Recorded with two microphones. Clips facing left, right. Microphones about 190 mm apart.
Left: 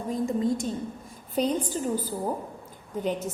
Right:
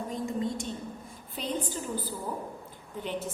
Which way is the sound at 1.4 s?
45° left (ahead or behind).